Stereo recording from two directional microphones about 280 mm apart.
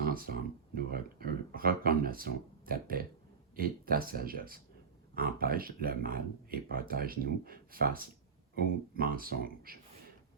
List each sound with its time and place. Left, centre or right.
0.0 s speech: right